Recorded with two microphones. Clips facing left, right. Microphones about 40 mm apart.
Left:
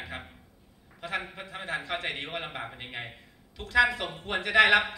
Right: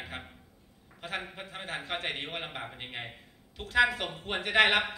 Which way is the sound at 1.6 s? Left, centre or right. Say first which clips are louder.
Left 3 dB; centre.